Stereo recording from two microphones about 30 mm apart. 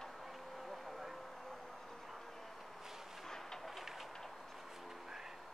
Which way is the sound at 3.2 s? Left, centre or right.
Centre.